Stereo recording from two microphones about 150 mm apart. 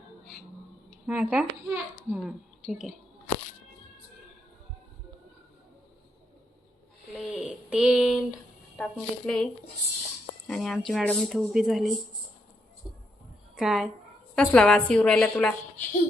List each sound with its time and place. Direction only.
1.0 s a child's voice: 10° right (ahead or behind)
7.2 s a sound: 5° right (ahead or behind)
8.8 s a child's voice: 5° left (ahead or behind)
13.6 s a child's voice: centre (ahead or behind)